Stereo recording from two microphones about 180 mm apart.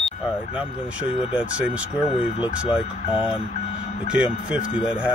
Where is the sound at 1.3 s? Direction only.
5° right (ahead or behind).